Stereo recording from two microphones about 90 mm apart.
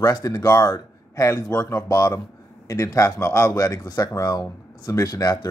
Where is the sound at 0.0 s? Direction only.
40° left (ahead or behind).